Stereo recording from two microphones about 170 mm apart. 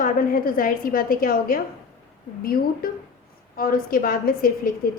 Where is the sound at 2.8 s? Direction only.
60° left (ahead or behind).